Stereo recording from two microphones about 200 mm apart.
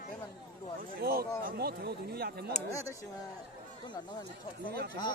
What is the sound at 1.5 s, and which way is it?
Speech, 50° right (ahead or behind).